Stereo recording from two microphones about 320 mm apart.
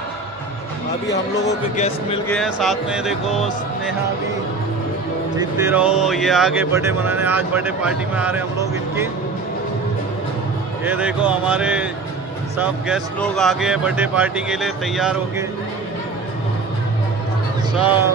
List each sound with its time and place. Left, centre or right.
1.8 s speech: centre
2.2 s speech: centre
5.4 s speech: centre
10.9 s speech: centre
17.7 s speech: centre